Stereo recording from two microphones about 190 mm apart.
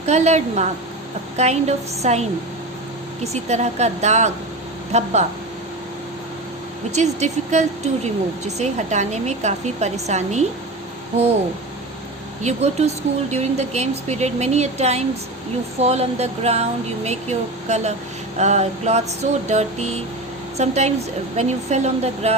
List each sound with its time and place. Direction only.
0.0 s speech: 35° right (ahead or behind)
3.3 s speech: 35° right (ahead or behind)
6.9 s speech: 35° right (ahead or behind)
12.4 s speech: 35° right (ahead or behind)